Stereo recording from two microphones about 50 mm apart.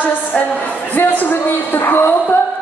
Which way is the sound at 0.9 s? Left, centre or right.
Left.